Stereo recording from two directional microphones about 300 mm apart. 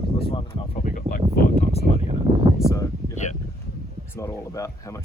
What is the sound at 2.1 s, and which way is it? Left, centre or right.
Speech, right.